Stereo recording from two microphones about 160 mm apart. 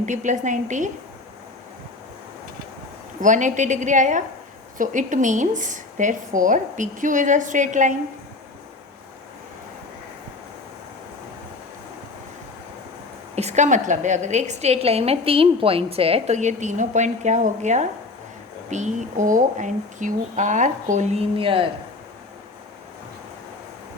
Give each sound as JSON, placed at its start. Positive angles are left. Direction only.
{"t": 0.0, "sound": "a woman's voice", "side_deg": -50}
{"t": 3.2, "sound": "a woman's voice", "side_deg": -50}
{"t": 13.3, "sound": "a woman's voice", "side_deg": -45}